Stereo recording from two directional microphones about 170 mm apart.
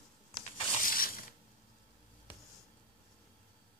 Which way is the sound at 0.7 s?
55° left (ahead or behind).